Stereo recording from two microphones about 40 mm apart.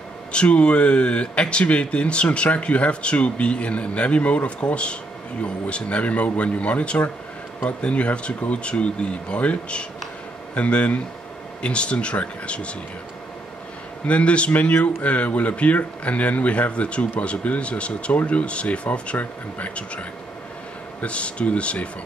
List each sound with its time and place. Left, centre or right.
0.3 s speech: left
14.0 s speech: left